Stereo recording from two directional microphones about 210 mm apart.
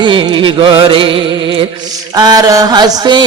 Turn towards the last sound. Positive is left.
turn(degrees=-20)  # may be behind; listen again after turning